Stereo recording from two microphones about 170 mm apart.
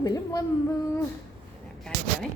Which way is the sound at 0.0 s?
20° left (ahead or behind).